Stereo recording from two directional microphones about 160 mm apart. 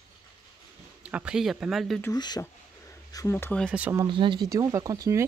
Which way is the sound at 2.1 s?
25° left (ahead or behind).